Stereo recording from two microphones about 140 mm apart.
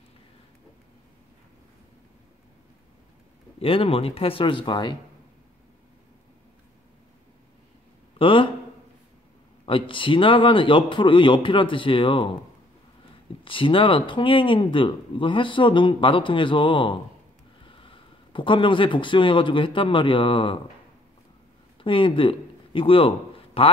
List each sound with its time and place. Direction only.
3.5 s speech: 40° left (ahead or behind)
8.2 s a sound: 40° left (ahead or behind)
9.7 s speech: 35° left (ahead or behind)
13.4 s speech: 35° left (ahead or behind)
21.8 s a man's voice: 35° left (ahead or behind)